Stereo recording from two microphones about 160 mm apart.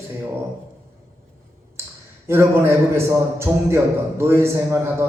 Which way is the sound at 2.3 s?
15° right (ahead or behind).